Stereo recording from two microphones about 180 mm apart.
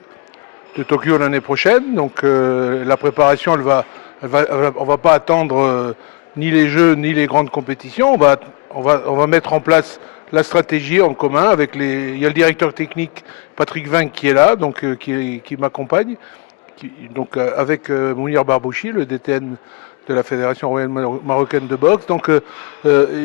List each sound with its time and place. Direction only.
0.8 s a man's voice: 15° left (ahead or behind)
17.2 s a man's voice: 15° left (ahead or behind)